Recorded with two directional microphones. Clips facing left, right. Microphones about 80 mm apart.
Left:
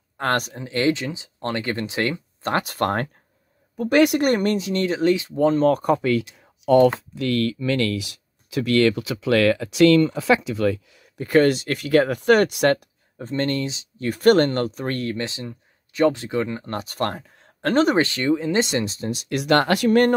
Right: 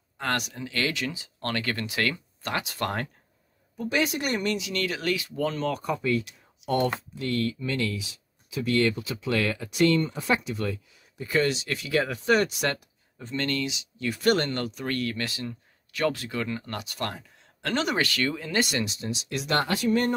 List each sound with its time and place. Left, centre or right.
0.2 s speech: left
2.4 s speech: left
3.7 s speech: left
5.7 s speech: left
7.2 s speech: left
18.9 s speech: left